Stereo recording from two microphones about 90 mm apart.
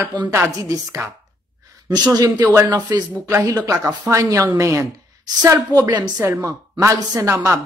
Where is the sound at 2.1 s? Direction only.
45° right (ahead or behind).